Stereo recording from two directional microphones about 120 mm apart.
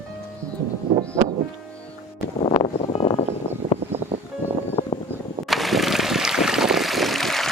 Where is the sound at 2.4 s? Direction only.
50° left (ahead or behind).